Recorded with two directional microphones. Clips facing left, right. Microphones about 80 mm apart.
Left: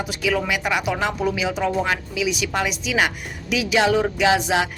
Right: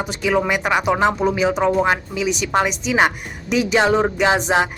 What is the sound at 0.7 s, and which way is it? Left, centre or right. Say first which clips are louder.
Speech: right 8 dB; right.